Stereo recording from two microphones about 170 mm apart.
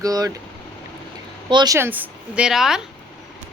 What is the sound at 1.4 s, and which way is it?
Speech, 25° right (ahead or behind).